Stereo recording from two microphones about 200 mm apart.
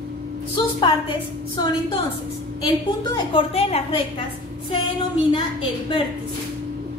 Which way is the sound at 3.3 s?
30° left (ahead or behind).